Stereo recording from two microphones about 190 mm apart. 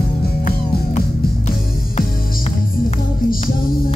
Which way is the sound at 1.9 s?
40° left (ahead or behind).